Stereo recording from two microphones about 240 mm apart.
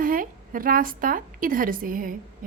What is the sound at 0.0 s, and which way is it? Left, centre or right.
A woman's voice, right.